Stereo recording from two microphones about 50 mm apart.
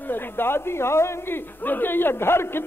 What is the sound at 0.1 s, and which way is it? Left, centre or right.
A man's voice, left.